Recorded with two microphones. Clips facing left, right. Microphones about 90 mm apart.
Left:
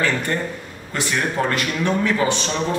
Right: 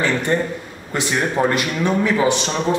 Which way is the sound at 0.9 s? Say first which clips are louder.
Right 2 dB; 20° right (ahead or behind).